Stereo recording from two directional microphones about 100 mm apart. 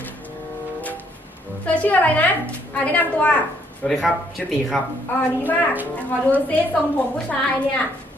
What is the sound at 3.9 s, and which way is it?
Speech, centre (ahead or behind).